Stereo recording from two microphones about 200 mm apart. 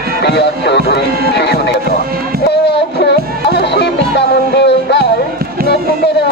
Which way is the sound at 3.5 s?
60° left (ahead or behind).